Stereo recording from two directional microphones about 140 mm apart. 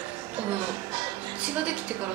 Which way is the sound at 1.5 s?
10° right (ahead or behind).